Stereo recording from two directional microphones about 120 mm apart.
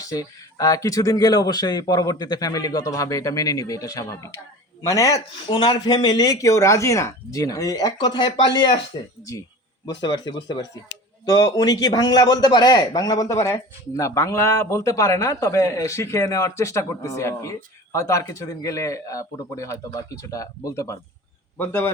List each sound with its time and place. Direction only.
0.0 s a man's voice: 30° left (ahead or behind)
10.0 s a man's voice: 35° left (ahead or behind); by 21.8 s 15° left (ahead or behind)